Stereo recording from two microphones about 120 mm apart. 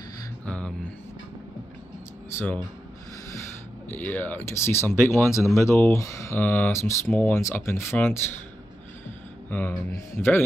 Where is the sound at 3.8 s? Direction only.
15° left (ahead or behind).